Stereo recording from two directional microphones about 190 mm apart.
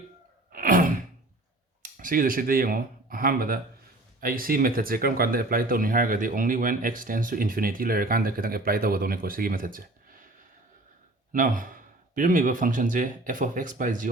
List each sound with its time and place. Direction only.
0.5 s sigh: 45° right (ahead or behind)
1.8 s speech: 45° right (ahead or behind)
11.3 s speech: 45° right (ahead or behind)